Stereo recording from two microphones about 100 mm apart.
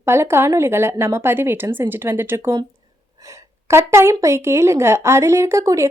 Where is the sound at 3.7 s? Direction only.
25° right (ahead or behind).